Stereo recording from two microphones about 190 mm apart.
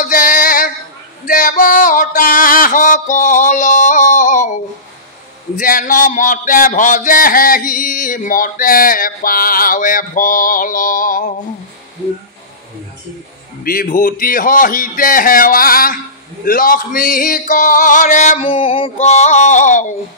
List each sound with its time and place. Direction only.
0.0 s a sound: 45° left (ahead or behind)
5.6 s speech: 45° left (ahead or behind)
13.7 s speech: 45° left (ahead or behind)
18.4 s music: 30° left (ahead or behind)